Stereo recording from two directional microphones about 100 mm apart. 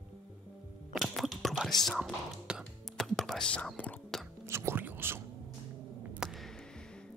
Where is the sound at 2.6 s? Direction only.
Centre (ahead or behind).